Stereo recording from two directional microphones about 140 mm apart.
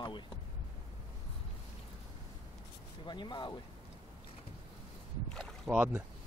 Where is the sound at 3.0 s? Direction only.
35° left (ahead or behind).